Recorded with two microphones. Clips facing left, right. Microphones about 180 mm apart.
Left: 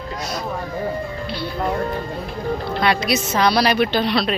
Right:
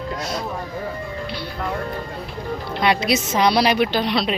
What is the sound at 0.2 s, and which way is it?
Speech, 25° right (ahead or behind).